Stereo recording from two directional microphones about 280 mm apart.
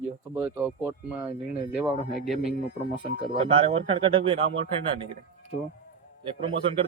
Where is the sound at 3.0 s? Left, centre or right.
Centre.